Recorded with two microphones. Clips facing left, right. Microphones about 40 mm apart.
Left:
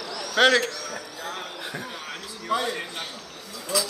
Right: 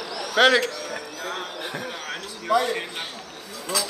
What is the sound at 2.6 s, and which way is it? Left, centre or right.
Speech, right.